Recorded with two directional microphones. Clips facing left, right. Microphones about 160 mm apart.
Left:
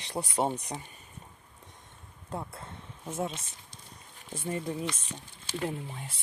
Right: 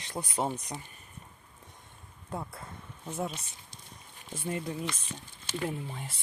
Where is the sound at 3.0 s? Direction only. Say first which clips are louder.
Left 1 dB; 5° left (ahead or behind).